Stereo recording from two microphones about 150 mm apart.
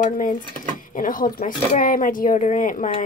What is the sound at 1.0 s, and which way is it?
Speech, 70° left (ahead or behind).